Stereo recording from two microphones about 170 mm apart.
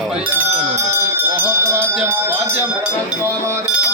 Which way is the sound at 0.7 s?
10° right (ahead or behind).